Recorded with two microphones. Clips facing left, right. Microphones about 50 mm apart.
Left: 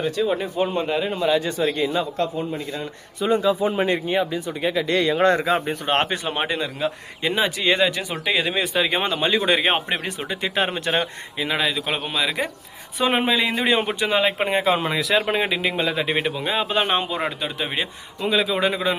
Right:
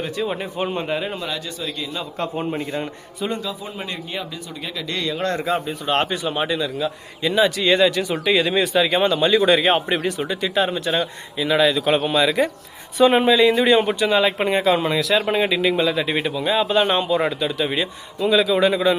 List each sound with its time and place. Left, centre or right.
0.0 s speech: centre
1.5 s speech: left
2.3 s speech: right
3.4 s a man's voice: left
5.5 s speech: left
5.8 s a man's voice: left; by 10.3 s centre
10.4 s speech: left
11.4 s a man's voice: centre
17.6 s a man's voice: left